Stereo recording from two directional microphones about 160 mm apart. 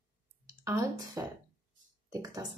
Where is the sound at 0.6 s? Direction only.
20° right (ahead or behind).